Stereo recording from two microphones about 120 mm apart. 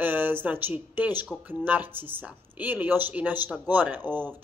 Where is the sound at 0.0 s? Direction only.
15° right (ahead or behind).